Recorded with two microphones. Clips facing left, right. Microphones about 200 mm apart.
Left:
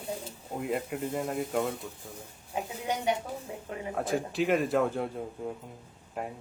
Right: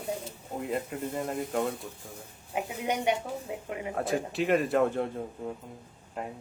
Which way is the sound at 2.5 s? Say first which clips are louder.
Right 2 dB; 15° right (ahead or behind).